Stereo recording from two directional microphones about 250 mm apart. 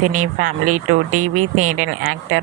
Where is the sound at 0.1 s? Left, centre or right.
Right.